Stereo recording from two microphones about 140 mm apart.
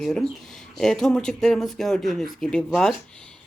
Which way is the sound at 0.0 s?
Centre (ahead or behind).